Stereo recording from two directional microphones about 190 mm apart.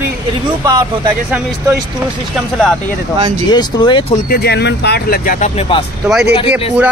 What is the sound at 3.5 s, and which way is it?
Speech, 25° left (ahead or behind).